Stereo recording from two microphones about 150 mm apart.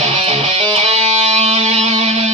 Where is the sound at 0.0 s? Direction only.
40° right (ahead or behind).